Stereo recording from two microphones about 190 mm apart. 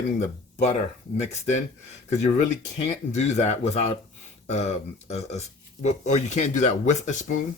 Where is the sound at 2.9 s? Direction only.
35° left (ahead or behind).